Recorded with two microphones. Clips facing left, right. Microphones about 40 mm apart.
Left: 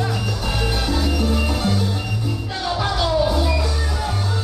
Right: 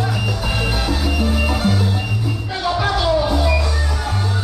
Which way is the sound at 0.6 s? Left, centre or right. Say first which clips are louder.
Left 1 dB; centre.